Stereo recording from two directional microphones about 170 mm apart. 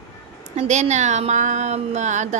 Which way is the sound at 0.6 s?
45° right (ahead or behind).